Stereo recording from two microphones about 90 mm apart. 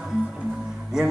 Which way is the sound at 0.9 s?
5° right (ahead or behind).